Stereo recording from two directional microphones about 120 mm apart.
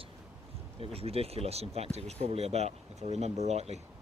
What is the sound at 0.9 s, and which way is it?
Speech, 55° right (ahead or behind).